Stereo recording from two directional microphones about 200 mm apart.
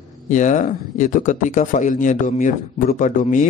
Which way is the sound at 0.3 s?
40° left (ahead or behind).